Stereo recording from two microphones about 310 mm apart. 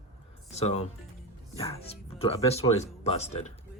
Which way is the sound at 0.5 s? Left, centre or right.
Centre.